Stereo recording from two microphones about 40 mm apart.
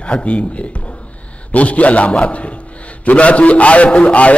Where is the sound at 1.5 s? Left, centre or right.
Left.